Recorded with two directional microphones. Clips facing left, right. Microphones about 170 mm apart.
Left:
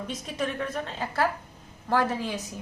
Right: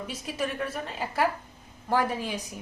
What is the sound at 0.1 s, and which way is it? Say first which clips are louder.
A woman's voice: left 1 dB; 5° right (ahead or behind).